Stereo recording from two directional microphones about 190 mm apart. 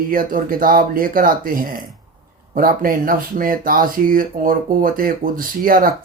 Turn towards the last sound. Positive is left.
turn(degrees=-50)  # may be behind; listen again after turning